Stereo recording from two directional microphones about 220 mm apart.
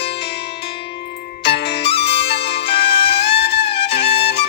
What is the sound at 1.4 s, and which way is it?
Music, 50° left (ahead or behind).